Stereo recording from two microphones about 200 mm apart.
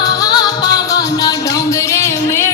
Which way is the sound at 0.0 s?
20° left (ahead or behind).